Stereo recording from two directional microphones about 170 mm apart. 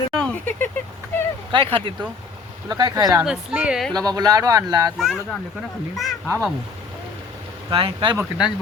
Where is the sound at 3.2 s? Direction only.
5° right (ahead or behind).